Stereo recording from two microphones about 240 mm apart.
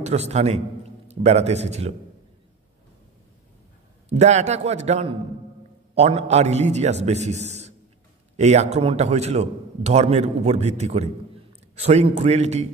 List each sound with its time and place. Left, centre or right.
0.0 s a man's voice: right
4.1 s a man's voice: right